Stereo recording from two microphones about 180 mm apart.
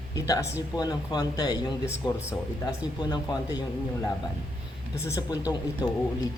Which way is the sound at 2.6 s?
20° left (ahead or behind).